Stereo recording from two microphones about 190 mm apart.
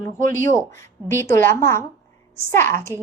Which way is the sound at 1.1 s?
15° left (ahead or behind).